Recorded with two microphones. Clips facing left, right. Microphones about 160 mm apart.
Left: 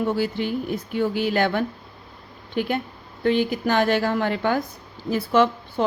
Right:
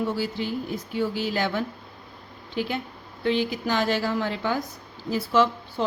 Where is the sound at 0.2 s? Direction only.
60° left (ahead or behind).